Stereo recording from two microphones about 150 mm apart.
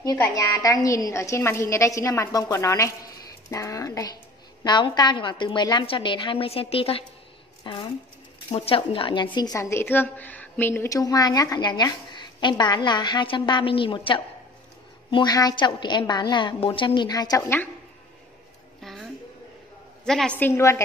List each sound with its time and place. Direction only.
0.0 s a woman's voice: 25° left (ahead or behind)
18.8 s a sound: centre (ahead or behind)
20.1 s a woman's voice: 5° left (ahead or behind)